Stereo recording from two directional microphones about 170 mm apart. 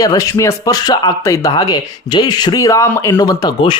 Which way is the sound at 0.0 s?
20° left (ahead or behind).